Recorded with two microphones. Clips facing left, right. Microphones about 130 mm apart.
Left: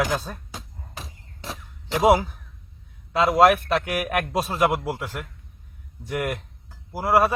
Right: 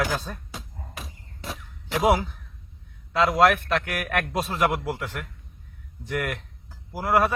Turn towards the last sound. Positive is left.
turn(degrees=10)  # may be behind; listen again after turning